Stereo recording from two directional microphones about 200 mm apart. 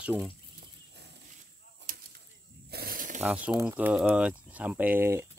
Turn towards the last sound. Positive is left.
turn(degrees=-10)  # may be behind; listen again after turning